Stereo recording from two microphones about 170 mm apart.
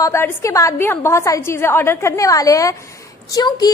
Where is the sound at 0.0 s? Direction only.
15° left (ahead or behind).